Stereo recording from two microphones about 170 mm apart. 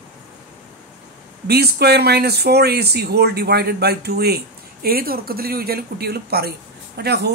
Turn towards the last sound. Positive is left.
turn(degrees=-75)  # may be behind; listen again after turning